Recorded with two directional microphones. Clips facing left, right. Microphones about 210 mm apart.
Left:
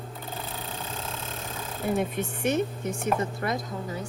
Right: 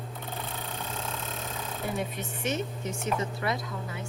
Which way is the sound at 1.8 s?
50° left (ahead or behind).